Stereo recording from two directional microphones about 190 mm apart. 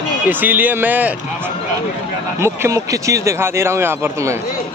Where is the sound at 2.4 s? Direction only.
15° right (ahead or behind).